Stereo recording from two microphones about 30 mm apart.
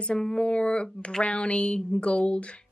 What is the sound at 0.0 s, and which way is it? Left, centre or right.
A woman's voice, left.